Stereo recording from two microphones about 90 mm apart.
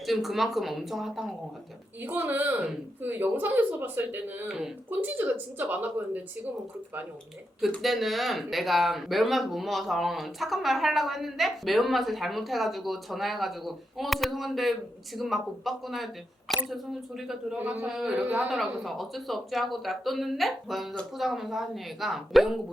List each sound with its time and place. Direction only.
0.0 s speech: centre (ahead or behind)
2.0 s speech: 20° right (ahead or behind)
4.4 s a man's voice: 10° right (ahead or behind)
4.9 s speech: 20° right (ahead or behind)
7.8 s a man's voice: centre (ahead or behind)
18.5 s speech: centre (ahead or behind)